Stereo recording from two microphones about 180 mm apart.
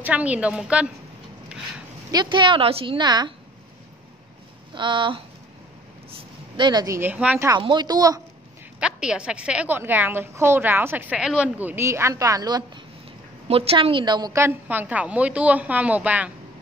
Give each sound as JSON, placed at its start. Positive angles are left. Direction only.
{"t": 0.0, "sound": "a woman's voice", "side_deg": -10}
{"t": 2.0, "sound": "a woman's voice", "side_deg": -25}
{"t": 4.7, "sound": "a woman's voice", "side_deg": -25}
{"t": 7.4, "sound": "a woman's voice", "side_deg": -25}
{"t": 8.7, "sound": "a woman's voice", "side_deg": -5}